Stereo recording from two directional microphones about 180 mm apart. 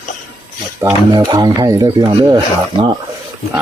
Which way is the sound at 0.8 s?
25° right (ahead or behind).